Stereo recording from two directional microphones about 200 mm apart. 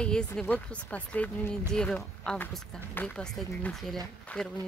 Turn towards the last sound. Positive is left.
turn(degrees=5)  # may be behind; listen again after turning